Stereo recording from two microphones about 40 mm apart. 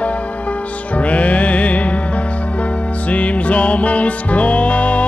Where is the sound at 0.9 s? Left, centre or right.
Left.